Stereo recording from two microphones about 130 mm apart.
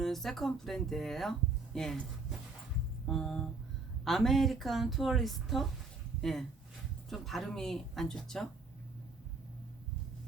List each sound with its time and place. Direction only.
0.0 s speech: centre (ahead or behind)
3.1 s a woman's voice: 5° left (ahead or behind)
7.1 s a woman's voice: centre (ahead or behind)